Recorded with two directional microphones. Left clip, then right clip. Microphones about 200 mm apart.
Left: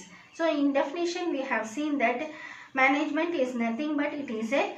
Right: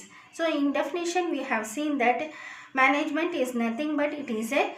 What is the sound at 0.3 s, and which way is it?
Speech, 50° right (ahead or behind).